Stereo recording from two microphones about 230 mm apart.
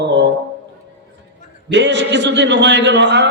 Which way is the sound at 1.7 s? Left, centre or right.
Right.